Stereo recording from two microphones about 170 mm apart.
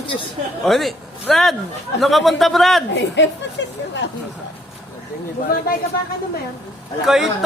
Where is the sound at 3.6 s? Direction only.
90° left.